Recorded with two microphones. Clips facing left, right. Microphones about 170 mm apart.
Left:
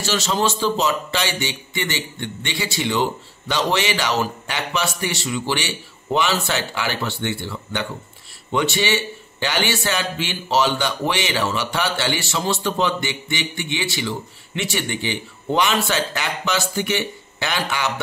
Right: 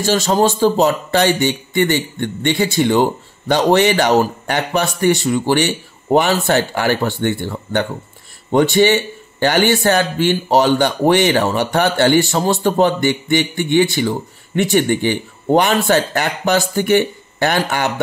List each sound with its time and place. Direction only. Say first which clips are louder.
0.0 s speech: right 7 dB; 50° right (ahead or behind)